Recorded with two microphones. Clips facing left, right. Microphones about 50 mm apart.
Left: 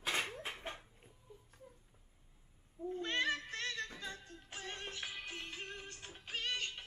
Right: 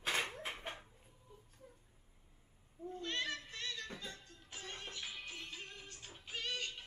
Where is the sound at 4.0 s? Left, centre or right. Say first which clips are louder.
Left 4 dB; left.